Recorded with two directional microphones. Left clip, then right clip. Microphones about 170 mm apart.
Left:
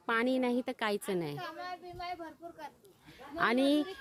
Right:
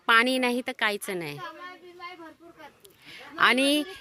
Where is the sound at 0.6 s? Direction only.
10° left (ahead or behind).